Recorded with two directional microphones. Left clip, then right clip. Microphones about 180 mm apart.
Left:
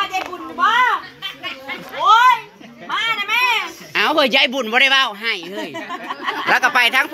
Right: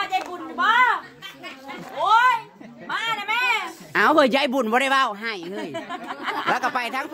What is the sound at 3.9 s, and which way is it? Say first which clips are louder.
Speech: left 3 dB; 45° right (ahead or behind).